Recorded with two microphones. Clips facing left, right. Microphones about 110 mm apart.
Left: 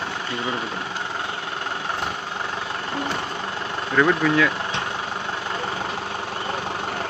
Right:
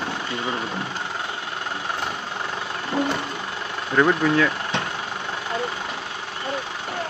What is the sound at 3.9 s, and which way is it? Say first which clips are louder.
Speech: even; 20° right (ahead or behind).